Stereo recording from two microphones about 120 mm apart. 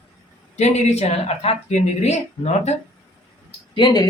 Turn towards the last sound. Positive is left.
turn(degrees=40)  # may be behind; listen again after turning